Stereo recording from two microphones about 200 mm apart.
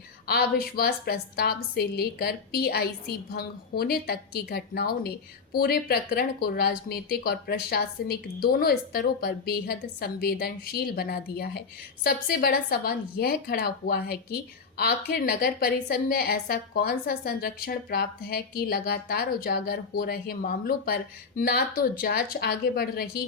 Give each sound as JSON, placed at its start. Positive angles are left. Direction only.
{"t": 0.3, "sound": "a woman's voice", "side_deg": 50}